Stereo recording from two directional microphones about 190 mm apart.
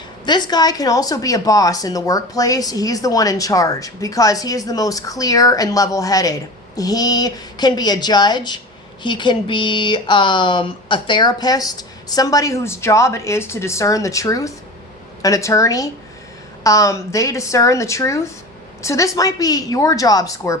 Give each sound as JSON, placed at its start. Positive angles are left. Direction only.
{"t": 0.3, "sound": "a woman's voice", "side_deg": 20}